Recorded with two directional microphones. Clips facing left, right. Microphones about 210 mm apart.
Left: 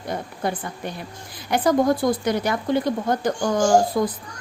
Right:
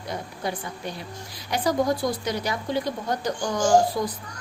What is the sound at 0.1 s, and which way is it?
A woman's voice, 50° left (ahead or behind).